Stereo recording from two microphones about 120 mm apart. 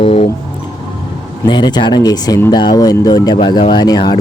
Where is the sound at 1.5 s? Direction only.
40° left (ahead or behind).